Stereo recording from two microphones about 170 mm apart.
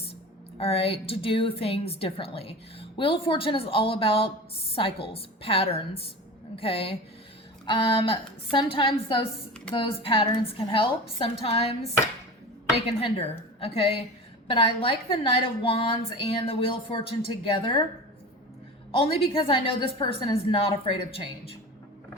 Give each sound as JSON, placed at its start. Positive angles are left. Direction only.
{"t": 0.6, "sound": "a woman's voice", "side_deg": 35}
{"t": 18.9, "sound": "a woman's voice", "side_deg": 35}